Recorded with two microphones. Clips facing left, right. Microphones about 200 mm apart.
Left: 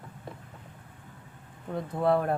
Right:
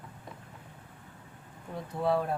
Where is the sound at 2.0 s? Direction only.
55° left (ahead or behind).